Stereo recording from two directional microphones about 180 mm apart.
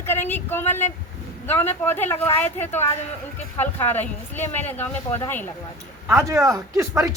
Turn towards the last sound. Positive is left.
turn(degrees=-15)  # may be behind; listen again after turning